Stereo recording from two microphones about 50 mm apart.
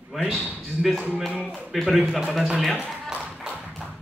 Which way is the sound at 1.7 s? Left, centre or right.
Centre.